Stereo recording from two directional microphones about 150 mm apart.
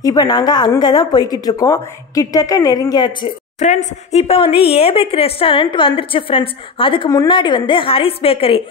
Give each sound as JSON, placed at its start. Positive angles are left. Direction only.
{"t": 0.0, "sound": "speech", "side_deg": 25}
{"t": 3.5, "sound": "speech", "side_deg": 50}